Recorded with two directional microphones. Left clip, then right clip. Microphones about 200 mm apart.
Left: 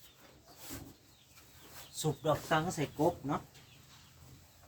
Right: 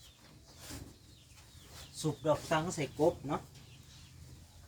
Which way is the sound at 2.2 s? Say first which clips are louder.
Even; 15° left (ahead or behind).